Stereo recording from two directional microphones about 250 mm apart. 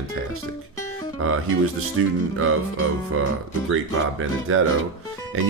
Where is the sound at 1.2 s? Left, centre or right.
Right.